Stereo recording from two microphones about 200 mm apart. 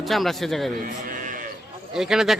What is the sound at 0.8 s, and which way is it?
Sheep, 40° right (ahead or behind).